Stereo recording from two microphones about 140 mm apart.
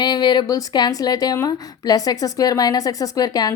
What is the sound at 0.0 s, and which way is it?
A woman's voice, 30° left (ahead or behind).